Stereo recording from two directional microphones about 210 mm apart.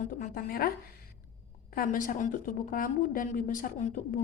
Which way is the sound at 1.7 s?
40° left (ahead or behind).